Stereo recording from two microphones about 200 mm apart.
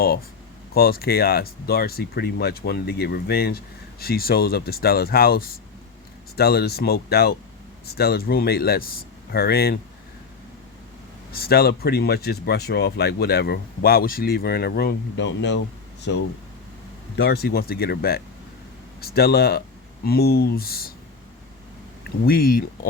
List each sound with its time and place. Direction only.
0.7 s speech: 50° left (ahead or behind)
11.3 s speech: 50° left (ahead or behind)
22.2 s speech: 50° left (ahead or behind)